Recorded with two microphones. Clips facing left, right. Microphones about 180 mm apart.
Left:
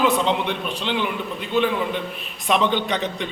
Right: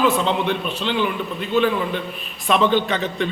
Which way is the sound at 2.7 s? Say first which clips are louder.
Right 3 dB; 5° right (ahead or behind).